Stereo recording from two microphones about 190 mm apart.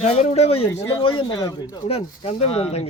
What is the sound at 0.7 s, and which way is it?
Speech, 15° left (ahead or behind).